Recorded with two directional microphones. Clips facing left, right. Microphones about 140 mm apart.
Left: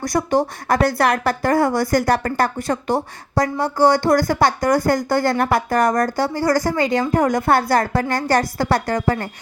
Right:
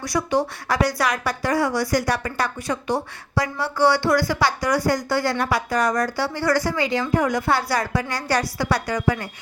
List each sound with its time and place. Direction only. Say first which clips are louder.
0.0 s speech: left 3 dB; 45° left (ahead or behind)